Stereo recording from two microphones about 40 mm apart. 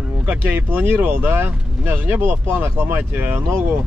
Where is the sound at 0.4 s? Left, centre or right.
Right.